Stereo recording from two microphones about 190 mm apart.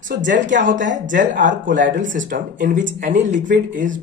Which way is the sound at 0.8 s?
40° right (ahead or behind).